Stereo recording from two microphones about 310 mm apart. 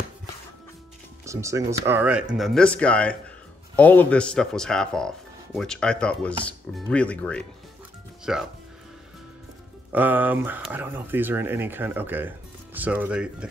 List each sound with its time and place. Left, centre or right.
1.2 s speech: centre
9.9 s speech: centre